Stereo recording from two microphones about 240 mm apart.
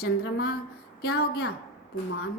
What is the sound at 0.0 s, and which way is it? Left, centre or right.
A woman's voice, left.